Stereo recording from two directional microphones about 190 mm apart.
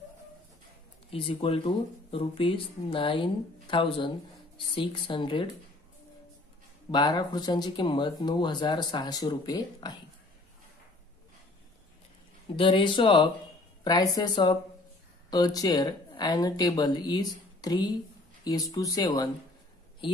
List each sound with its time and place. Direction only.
1.1 s speech: 30° left (ahead or behind)
6.9 s speech: 25° left (ahead or behind)
12.5 s speech: 25° left (ahead or behind)